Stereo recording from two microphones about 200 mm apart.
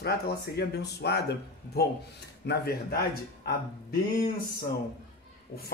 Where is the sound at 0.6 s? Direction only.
55° left (ahead or behind).